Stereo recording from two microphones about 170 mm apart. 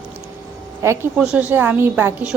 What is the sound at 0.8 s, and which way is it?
A woman's voice, 15° right (ahead or behind).